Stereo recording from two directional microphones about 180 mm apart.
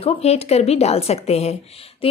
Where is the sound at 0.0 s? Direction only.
35° left (ahead or behind).